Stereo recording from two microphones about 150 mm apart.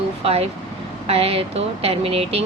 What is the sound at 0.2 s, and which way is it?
Speech, 45° right (ahead or behind).